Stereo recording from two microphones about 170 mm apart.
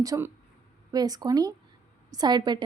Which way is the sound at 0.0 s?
20° right (ahead or behind).